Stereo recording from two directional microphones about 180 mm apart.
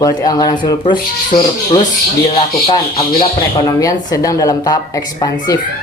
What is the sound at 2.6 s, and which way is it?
Speech, 30° left (ahead or behind).